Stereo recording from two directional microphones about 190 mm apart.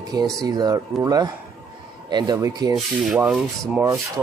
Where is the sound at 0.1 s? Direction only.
20° right (ahead or behind).